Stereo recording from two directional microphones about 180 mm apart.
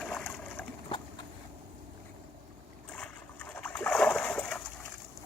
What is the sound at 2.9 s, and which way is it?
Splash, 5° left (ahead or behind).